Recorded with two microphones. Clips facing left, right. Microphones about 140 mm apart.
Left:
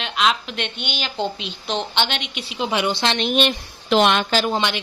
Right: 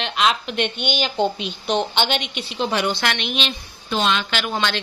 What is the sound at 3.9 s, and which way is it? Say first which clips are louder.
Speech: left 5 dB; 60° left (ahead or behind).